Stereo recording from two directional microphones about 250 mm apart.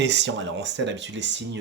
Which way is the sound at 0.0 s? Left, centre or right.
Right.